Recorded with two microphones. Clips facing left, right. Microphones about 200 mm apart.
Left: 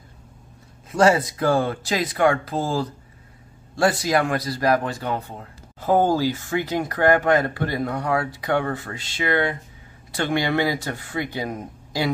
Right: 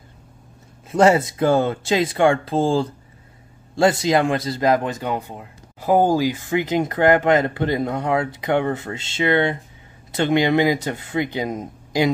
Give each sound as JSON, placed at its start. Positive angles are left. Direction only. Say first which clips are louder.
{"t": 0.9, "sound": "speech", "louder": "right 2 dB", "side_deg": -20}